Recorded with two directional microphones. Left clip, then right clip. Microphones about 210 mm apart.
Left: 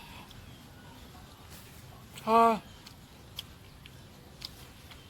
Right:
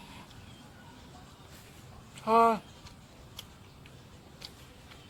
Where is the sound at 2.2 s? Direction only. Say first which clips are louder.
Even; 5° left (ahead or behind).